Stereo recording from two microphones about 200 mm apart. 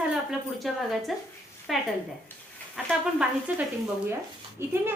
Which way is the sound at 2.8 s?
5° right (ahead or behind).